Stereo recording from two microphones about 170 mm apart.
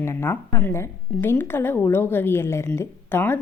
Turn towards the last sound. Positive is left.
turn(degrees=10)  # may be behind; listen again after turning